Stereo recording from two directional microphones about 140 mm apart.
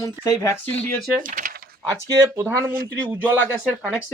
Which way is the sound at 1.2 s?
80° right.